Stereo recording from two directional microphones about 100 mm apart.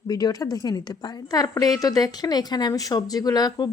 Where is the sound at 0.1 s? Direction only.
40° left (ahead or behind).